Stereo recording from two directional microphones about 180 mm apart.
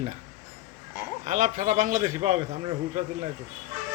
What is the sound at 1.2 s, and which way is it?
A man's voice, 45° right (ahead or behind).